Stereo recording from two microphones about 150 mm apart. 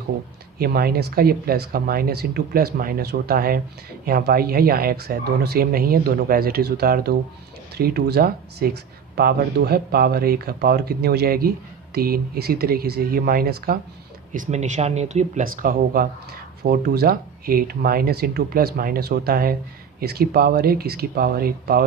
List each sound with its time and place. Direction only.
0.6 s speech: 90° right
14.3 s speech: 55° right (ahead or behind)
15.4 s speech: 70° right (ahead or behind)
16.6 s speech: 90° right